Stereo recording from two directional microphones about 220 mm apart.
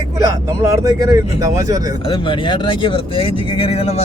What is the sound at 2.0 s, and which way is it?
Speech, 20° left (ahead or behind).